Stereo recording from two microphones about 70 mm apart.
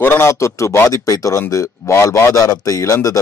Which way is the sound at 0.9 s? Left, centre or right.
Left.